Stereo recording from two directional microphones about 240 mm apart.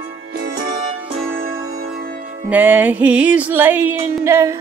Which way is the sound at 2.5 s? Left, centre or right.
Centre.